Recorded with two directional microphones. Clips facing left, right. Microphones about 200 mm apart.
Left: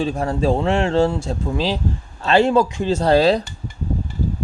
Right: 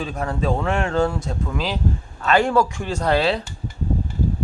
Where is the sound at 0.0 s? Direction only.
30° left (ahead or behind).